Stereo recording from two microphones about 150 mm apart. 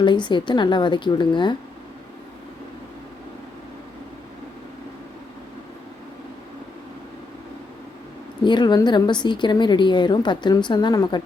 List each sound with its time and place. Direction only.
0.0 s a woman's voice: 30° left (ahead or behind)
8.4 s a woman's voice: 30° left (ahead or behind)